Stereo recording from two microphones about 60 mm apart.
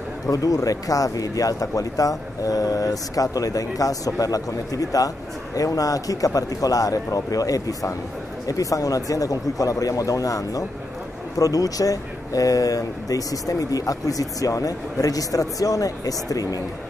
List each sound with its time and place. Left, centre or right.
0.3 s speech: left